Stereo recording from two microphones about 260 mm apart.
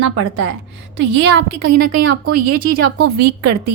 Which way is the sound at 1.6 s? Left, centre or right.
Right.